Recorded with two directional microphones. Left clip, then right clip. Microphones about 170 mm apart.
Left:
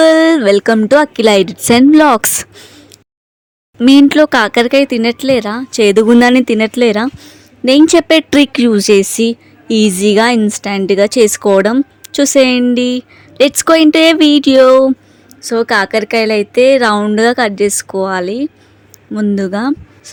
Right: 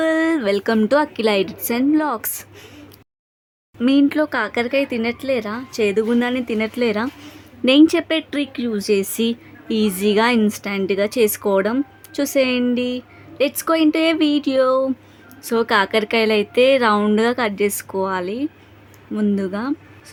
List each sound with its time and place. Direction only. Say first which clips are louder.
0.0 s a sound: left 11 dB; 45° left (ahead or behind)
0.8 s a woman's voice: left 8 dB; 30° left (ahead or behind); by 2.5 s 50° left (ahead or behind)
3.8 s speech: left 10 dB; 45° left (ahead or behind)
7.2 s a woman's voice: left 3 dB; 25° left (ahead or behind); by 14.9 s 40° left (ahead or behind)
15.4 s a woman's voice: left 5 dB; 25° left (ahead or behind)